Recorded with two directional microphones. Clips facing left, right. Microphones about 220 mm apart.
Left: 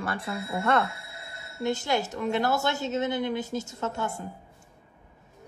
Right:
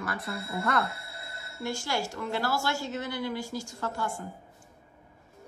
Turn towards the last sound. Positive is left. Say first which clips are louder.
# left 2 dB
turn(degrees=20)  # may be behind; listen again after turning